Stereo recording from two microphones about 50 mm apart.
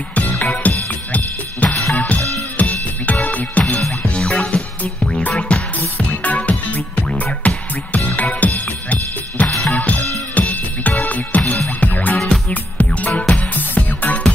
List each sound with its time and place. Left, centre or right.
0.1 s music: left
4.2 s music: centre
5.5 s music: left
9.5 s drum kit: centre
9.8 s music: left
11.4 s music: centre
11.8 s music: left
12.2 s music: centre
12.7 s music: left